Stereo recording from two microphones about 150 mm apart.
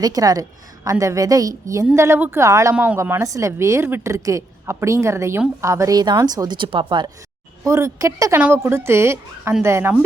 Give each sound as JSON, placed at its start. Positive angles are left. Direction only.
{"t": 0.0, "sound": "a woman's voice", "side_deg": -25}
{"t": 7.7, "sound": "a woman's voice", "side_deg": -20}